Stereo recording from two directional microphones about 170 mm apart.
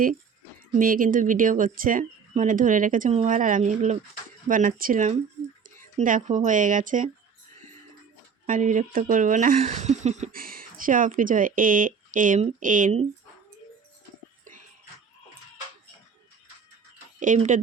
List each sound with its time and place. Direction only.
0.7 s speech: 55° right (ahead or behind)
8.4 s speech: 50° right (ahead or behind)
17.2 s speech: 45° right (ahead or behind)